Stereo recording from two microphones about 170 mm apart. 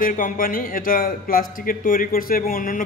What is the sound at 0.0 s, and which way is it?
A man's voice, 55° left (ahead or behind).